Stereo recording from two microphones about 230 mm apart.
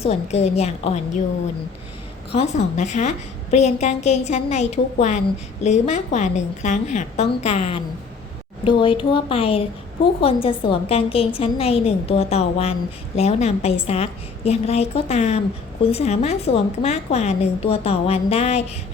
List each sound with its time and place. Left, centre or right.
0.0 s a woman's voice: left
2.3 s a woman's voice: left